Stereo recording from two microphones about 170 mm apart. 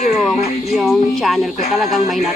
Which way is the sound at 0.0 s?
40° left (ahead or behind).